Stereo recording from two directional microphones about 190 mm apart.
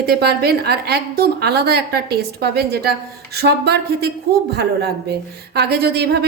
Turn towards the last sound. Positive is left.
turn(degrees=-60)  # may be behind; listen again after turning